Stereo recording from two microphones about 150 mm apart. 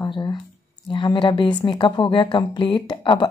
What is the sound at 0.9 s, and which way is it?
A woman's voice, 30° left (ahead or behind).